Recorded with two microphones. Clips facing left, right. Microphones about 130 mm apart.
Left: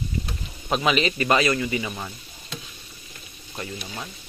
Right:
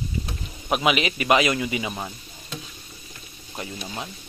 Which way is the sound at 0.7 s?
10° right (ahead or behind).